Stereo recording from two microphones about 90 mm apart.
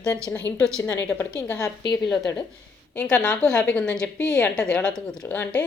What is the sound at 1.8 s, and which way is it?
Speech, 50° left (ahead or behind).